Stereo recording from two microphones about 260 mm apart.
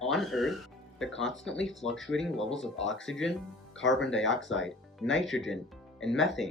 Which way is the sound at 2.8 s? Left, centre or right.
Left.